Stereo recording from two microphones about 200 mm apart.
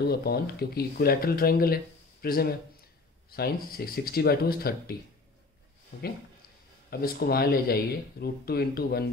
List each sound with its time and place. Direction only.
0.0 s speech: 50° left (ahead or behind)
6.9 s speech: 50° left (ahead or behind)